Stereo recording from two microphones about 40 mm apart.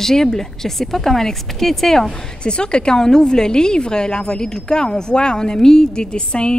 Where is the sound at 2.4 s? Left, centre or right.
Left.